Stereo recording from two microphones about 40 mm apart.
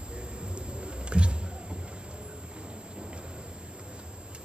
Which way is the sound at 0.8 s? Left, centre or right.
Right.